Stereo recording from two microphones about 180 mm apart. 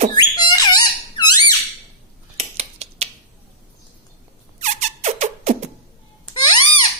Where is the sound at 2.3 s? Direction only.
35° right (ahead or behind).